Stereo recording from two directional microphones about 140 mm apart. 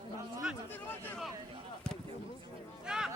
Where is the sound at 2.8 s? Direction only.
5° right (ahead or behind).